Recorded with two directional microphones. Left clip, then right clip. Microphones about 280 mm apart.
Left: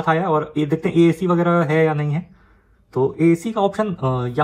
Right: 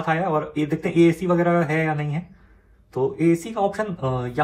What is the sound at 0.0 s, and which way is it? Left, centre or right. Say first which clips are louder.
Speech: left 4 dB; left.